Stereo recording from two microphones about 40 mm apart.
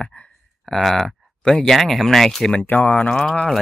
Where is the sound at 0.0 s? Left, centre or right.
Left.